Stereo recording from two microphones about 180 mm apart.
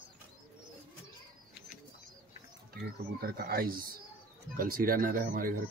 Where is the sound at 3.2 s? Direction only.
55° right (ahead or behind).